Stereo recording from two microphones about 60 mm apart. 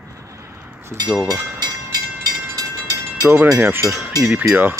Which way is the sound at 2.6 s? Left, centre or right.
Right.